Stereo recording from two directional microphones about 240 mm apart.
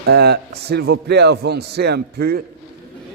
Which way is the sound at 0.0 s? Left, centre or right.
Right.